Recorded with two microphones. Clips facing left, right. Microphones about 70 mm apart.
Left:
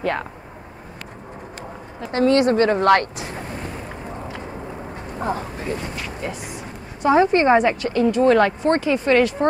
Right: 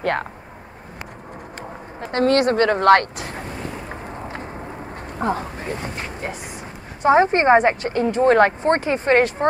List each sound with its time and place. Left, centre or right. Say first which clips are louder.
0.0 s speech: right 1 dB; right
2.0 s speech: left 1 dB; right
5.2 s a woman's voice: right 2 dB; right